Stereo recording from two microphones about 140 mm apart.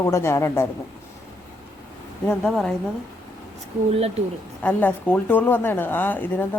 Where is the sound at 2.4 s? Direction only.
Centre (ahead or behind).